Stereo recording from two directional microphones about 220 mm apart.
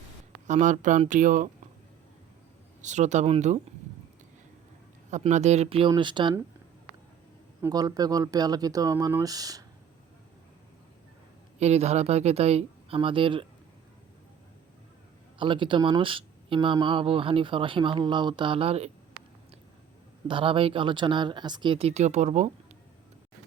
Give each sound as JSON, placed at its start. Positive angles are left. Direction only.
{"t": 0.4, "sound": "speech", "side_deg": -35}
{"t": 2.8, "sound": "speech", "side_deg": -30}
{"t": 5.1, "sound": "speech", "side_deg": -30}
{"t": 7.6, "sound": "speech", "side_deg": -15}
{"t": 11.6, "sound": "speech", "side_deg": -30}
{"t": 15.4, "sound": "speech", "side_deg": -20}
{"t": 20.2, "sound": "speech", "side_deg": -25}